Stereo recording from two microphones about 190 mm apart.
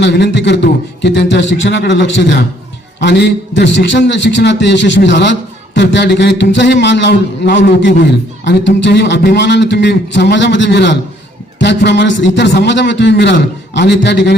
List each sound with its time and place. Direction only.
0.0 s a man's voice: 65° left (ahead or behind)